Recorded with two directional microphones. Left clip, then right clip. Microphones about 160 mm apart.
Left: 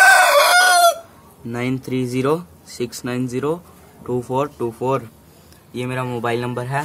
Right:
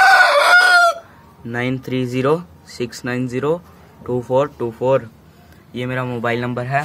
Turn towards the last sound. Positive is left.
turn(degrees=0)  # may be behind; listen again after turning